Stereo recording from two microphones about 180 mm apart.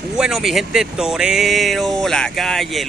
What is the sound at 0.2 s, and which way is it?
Speech, centre (ahead or behind).